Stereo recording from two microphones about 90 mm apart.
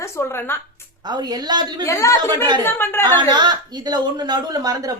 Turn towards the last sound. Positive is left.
turn(degrees=-45)  # may be behind; listen again after turning